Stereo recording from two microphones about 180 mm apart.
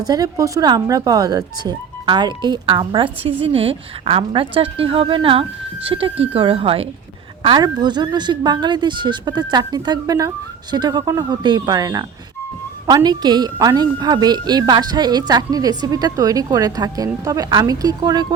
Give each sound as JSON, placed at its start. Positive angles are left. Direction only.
{"t": 0.0, "sound": "speech", "side_deg": -20}